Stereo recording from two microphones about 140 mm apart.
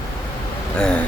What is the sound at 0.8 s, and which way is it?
Speech, 5° left (ahead or behind).